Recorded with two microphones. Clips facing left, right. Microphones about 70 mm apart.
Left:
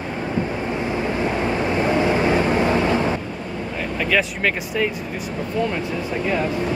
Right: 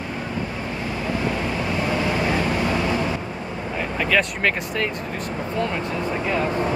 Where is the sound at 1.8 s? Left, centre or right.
Left.